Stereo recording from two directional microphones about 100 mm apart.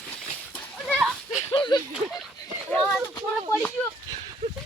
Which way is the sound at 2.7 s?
5° left (ahead or behind).